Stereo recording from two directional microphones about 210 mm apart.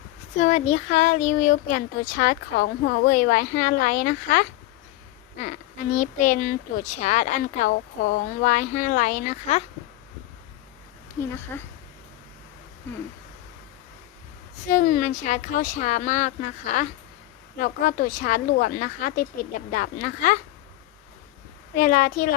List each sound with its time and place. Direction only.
0.3 s a woman's voice: 30° left (ahead or behind)
5.9 s speech: 35° left (ahead or behind)
11.5 s speech: 10° left (ahead or behind)
14.7 s speech: 40° left (ahead or behind)
21.8 s speech: 40° left (ahead or behind)